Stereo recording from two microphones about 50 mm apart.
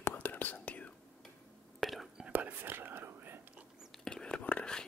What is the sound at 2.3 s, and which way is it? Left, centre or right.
Whispering, right.